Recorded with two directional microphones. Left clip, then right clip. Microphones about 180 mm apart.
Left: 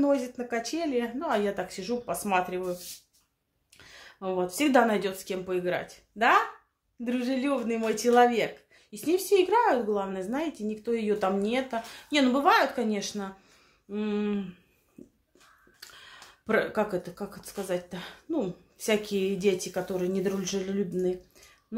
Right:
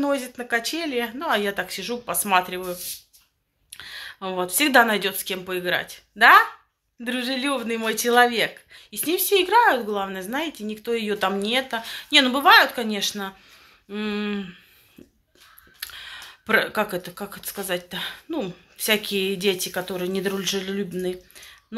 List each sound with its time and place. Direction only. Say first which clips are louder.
0.0 s speech: right 2 dB; centre (ahead or behind)
3.7 s speech: right 13 dB; centre (ahead or behind)
15.8 s speech: right 11 dB; centre (ahead or behind)